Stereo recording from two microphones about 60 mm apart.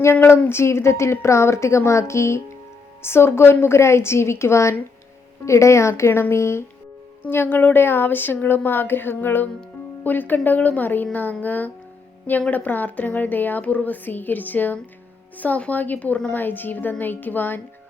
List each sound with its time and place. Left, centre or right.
0.0 s a woman's voice: left
6.1 s a woman's voice: left
6.3 s a woman's voice: left
7.3 s a woman's voice: left